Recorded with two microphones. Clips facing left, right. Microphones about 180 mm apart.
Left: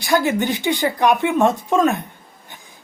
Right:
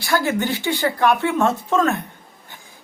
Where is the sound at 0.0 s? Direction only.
15° left (ahead or behind).